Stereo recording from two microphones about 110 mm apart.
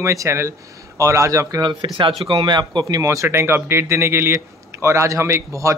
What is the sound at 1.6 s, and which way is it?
Speech, 40° right (ahead or behind).